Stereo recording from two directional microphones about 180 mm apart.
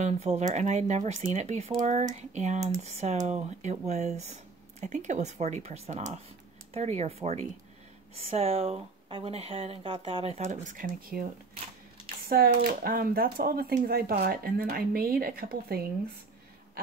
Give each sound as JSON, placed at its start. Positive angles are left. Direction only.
{"t": 0.0, "sound": "speech", "side_deg": -40}
{"t": 12.3, "sound": "speech", "side_deg": -55}